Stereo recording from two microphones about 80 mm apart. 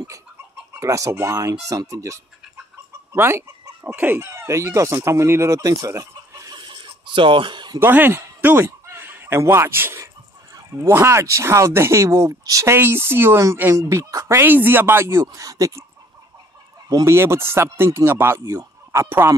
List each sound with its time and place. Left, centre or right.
0.7 s speech: right
3.1 s chicken: right
3.8 s speech: right
4.3 s speech: right
6.5 s chuckle: right
7.8 s speech: right
8.8 s a sound: right
9.4 s speech: right
12.7 s speech: right
17.0 s speech: right